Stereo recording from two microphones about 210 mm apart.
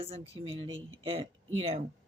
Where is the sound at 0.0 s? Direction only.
25° right (ahead or behind).